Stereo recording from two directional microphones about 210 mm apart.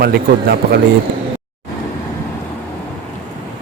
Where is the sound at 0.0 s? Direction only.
45° right (ahead or behind).